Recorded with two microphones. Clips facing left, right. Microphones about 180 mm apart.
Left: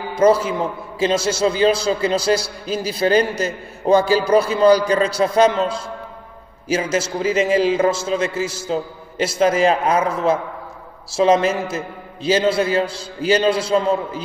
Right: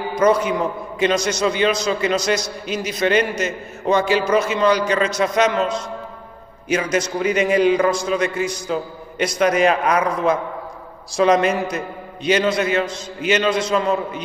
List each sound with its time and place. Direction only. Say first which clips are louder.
0.2 s a man's voice: left 2 dB; 30° left (ahead or behind)
11.1 s a man's voice: even; 25° left (ahead or behind)